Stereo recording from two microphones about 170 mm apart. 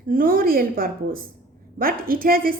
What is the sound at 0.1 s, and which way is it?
A woman's voice, 55° right (ahead or behind).